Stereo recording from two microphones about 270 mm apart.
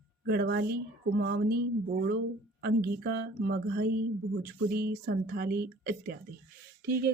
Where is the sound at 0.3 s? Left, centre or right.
Right.